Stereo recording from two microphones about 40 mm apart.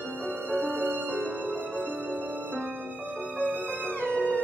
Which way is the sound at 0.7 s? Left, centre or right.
Right.